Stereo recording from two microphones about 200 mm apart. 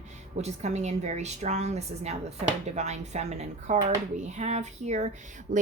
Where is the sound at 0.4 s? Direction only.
35° right (ahead or behind).